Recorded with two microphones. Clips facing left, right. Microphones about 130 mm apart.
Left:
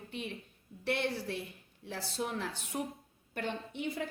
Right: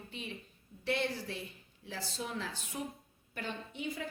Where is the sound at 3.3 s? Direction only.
60° left (ahead or behind).